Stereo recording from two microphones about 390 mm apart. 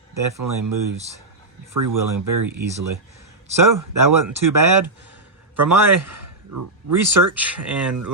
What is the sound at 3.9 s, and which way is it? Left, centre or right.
Speech, right.